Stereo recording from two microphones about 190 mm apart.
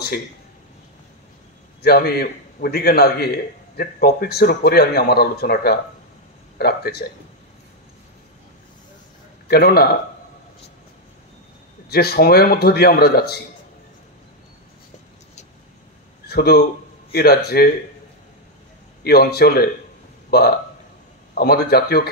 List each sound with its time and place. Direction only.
1.8 s speech: 55° left (ahead or behind)
9.5 s speech: 55° left (ahead or behind)
11.9 s speech: 55° left (ahead or behind)
16.3 s speech: 55° left (ahead or behind)
19.0 s speech: 55° left (ahead or behind)